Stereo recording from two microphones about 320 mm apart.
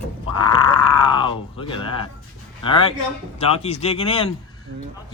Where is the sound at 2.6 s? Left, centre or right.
Centre.